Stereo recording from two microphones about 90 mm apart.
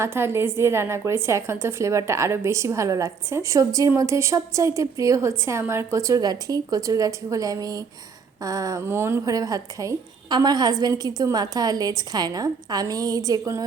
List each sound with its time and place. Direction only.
0.0 s a woman's voice: 25° right (ahead or behind)
8.9 s speech: 25° right (ahead or behind)
9.2 s a woman's voice: 40° right (ahead or behind)